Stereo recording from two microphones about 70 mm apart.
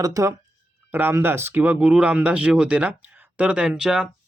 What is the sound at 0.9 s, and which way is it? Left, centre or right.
Speech, right.